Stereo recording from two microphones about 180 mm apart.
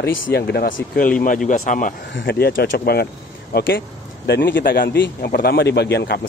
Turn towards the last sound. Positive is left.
turn(degrees=65)  # may be behind; listen again after turning